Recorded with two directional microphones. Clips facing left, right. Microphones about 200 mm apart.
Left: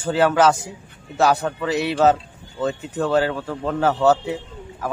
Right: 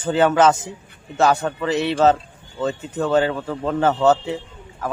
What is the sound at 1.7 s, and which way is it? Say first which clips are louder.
Speech: right 2 dB; 15° left (ahead or behind).